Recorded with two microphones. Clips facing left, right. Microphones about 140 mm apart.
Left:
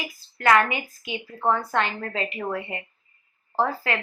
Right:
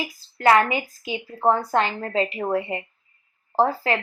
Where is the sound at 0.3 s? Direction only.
30° right (ahead or behind).